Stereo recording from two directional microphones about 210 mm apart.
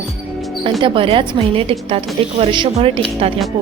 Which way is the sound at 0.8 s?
25° right (ahead or behind).